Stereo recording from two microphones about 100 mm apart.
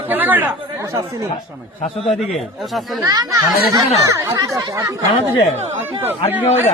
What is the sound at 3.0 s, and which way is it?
Speech, 35° right (ahead or behind).